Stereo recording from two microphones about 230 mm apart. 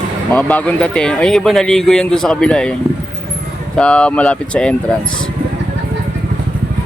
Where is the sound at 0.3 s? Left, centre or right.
Centre.